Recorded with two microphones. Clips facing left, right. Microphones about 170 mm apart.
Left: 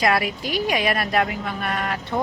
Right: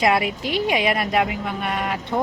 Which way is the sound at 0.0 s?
20° right (ahead or behind).